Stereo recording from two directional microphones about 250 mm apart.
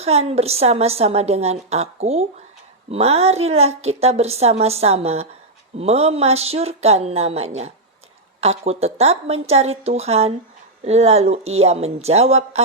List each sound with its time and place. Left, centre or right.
0.0 s a woman's voice: right